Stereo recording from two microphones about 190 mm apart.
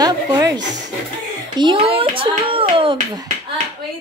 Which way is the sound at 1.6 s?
25° right (ahead or behind).